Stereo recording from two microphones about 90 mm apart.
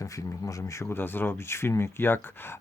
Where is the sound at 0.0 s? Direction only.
35° left (ahead or behind).